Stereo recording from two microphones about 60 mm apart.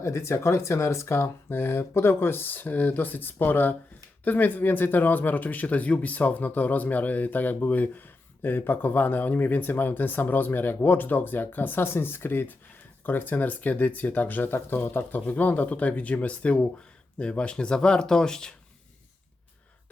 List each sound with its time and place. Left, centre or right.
0.0 s speech: left; by 18.5 s centre